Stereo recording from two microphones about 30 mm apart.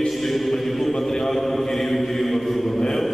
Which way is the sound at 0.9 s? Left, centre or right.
Centre.